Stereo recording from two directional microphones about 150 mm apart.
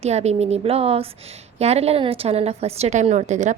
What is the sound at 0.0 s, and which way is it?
A woman's voice, 45° right (ahead or behind).